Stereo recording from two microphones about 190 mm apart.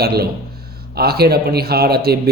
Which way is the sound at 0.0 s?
55° right (ahead or behind).